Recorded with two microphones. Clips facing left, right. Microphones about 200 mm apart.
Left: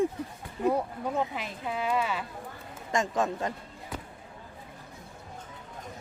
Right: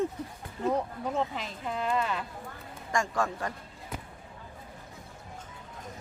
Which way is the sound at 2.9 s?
20° left (ahead or behind).